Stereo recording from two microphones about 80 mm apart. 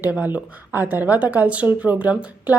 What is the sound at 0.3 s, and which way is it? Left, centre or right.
A woman's voice, right.